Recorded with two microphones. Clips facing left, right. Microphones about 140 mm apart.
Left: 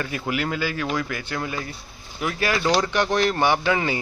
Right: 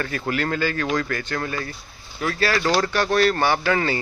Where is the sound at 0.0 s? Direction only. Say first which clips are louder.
Right 1 dB; 10° left (ahead or behind).